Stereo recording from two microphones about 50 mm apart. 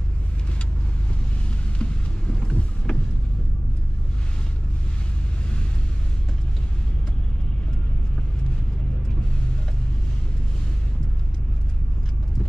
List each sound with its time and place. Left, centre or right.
1.8 s vehicle: left